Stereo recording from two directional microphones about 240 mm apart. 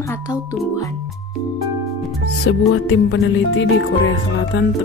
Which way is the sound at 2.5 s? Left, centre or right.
Left.